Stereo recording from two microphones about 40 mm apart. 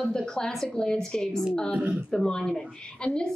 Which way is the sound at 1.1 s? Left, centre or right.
Centre.